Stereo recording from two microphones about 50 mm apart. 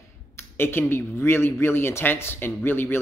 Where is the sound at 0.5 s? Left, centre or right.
Left.